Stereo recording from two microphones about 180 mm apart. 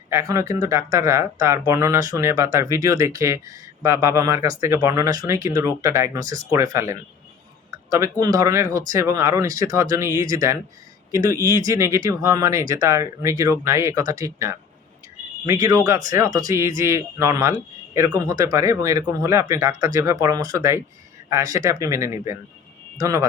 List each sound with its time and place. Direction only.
0.1 s speech: 15° right (ahead or behind)